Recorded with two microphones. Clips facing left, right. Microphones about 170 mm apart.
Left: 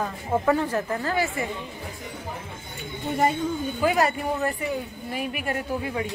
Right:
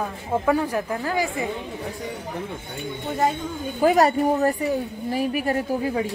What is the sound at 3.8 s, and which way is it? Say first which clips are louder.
A woman's voice: right 6 dB; 40° right (ahead or behind).